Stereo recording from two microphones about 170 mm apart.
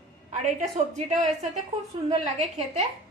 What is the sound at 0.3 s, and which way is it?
A woman's voice, 45° right (ahead or behind).